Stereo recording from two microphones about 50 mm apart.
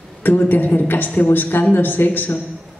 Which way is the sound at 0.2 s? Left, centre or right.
Left.